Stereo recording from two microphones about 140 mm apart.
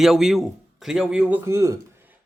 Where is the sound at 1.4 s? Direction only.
20° right (ahead or behind).